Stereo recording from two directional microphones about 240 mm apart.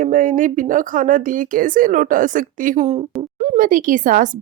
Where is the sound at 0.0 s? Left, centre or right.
Right.